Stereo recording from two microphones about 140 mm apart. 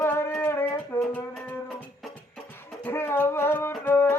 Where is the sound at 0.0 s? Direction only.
15° left (ahead or behind).